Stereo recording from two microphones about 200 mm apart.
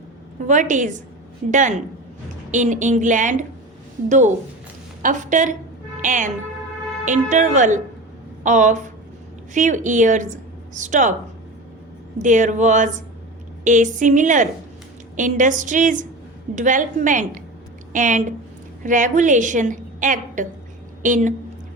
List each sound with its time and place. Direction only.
0.4 s a woman's voice: 40° right (ahead or behind)
5.0 s a woman's voice: 40° right (ahead or behind)
12.2 s a woman's voice: 40° right (ahead or behind)